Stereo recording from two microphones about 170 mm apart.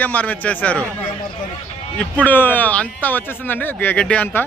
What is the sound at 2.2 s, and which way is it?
Speech, 10° left (ahead or behind).